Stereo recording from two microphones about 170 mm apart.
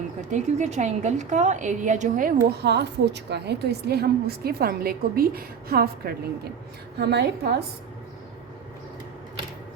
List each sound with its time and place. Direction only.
0.3 s a woman's voice: 45° right (ahead or behind); by 6.1 s 65° right (ahead or behind)
7.0 s a woman's voice: 75° right (ahead or behind)